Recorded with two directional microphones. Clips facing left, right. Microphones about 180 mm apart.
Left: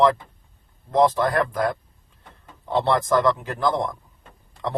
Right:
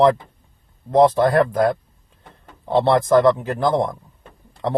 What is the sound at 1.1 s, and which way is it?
Speech, 40° right (ahead or behind).